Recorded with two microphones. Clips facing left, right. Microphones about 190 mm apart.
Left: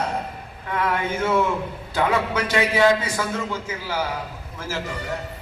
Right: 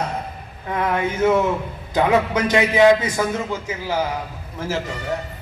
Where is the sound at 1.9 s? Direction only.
20° right (ahead or behind).